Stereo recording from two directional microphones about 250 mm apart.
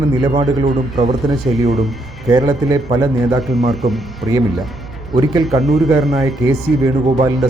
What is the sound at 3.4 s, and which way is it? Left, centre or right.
Speech, centre.